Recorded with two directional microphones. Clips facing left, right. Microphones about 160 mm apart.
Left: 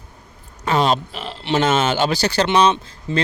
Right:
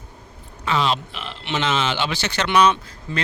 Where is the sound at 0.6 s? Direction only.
40° left (ahead or behind).